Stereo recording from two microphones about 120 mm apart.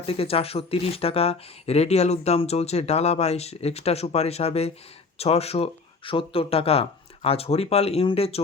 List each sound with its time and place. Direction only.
0.0 s speech: 55° left (ahead or behind)